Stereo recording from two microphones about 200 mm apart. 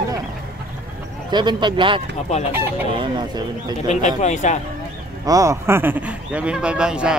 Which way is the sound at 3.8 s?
35° left (ahead or behind).